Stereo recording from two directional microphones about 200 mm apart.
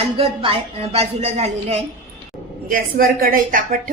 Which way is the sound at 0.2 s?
30° right (ahead or behind).